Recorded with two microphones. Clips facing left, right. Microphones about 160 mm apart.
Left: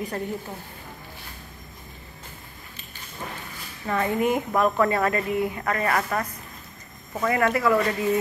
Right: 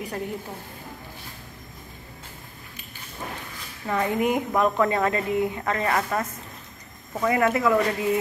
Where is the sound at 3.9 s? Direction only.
10° right (ahead or behind).